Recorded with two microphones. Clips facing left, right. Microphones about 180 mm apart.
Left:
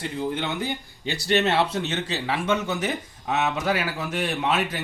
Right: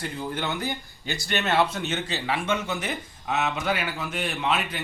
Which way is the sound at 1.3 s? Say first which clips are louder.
Left 3 dB; 30° left (ahead or behind).